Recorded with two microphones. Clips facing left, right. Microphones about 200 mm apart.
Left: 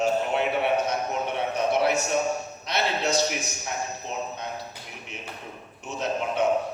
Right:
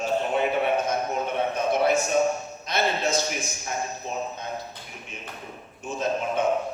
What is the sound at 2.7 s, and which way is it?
Speech, 65° left (ahead or behind).